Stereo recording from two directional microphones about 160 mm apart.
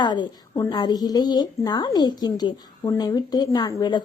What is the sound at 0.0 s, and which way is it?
A woman's voice, 25° left (ahead or behind).